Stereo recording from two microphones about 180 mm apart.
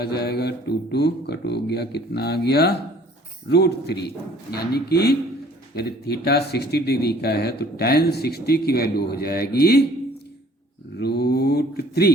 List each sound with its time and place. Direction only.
0.0 s speech: 65° left (ahead or behind)
10.9 s speech: 65° left (ahead or behind)